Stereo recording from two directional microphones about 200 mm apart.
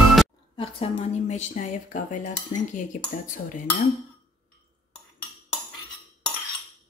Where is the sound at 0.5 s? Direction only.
25° left (ahead or behind).